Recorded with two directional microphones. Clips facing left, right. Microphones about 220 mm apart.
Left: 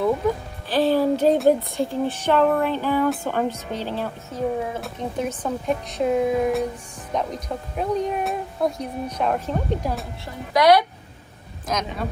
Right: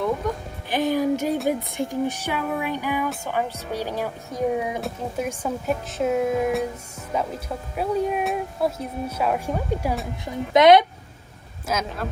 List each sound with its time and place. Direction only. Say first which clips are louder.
0.2 s speech: left 5 dB; 5° left (ahead or behind)
0.8 s music: left 4 dB; 15° right (ahead or behind)
1.6 s speech: left 1 dB; 15° right (ahead or behind)
10.5 s a woman's voice: right 2 dB; 20° right (ahead or behind)
11.6 s speech: even; 5° right (ahead or behind)